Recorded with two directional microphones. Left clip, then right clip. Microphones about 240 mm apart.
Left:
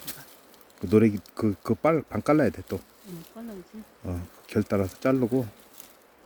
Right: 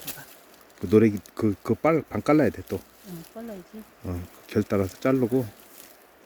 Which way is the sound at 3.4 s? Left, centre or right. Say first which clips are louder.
Right 4 dB; right.